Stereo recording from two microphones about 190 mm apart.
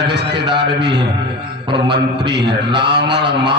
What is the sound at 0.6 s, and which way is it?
Speech, 65° right (ahead or behind).